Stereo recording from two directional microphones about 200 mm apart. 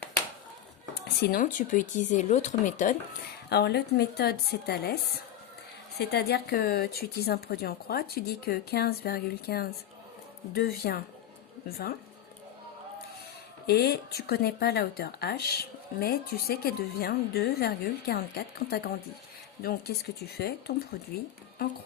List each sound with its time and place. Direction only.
0.9 s speech: 50° left (ahead or behind)
3.5 s speech: 55° left (ahead or behind)
6.0 s speech: 55° left (ahead or behind)
13.7 s speech: 50° left (ahead or behind)